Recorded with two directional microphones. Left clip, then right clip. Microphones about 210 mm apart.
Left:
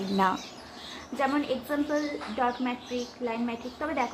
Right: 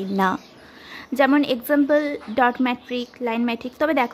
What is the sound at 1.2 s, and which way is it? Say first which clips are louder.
A woman's voice: right 9 dB; 55° right (ahead or behind).